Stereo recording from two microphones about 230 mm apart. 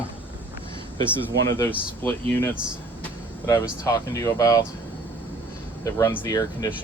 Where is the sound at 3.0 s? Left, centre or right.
Centre.